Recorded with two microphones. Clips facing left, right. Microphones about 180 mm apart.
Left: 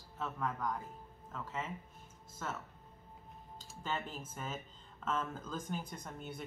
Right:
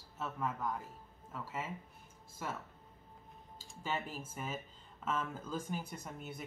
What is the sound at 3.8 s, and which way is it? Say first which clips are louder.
Speech: right 1 dB; 10° right (ahead or behind).